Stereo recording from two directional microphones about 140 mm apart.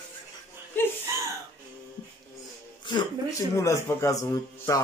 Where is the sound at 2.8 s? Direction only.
35° left (ahead or behind).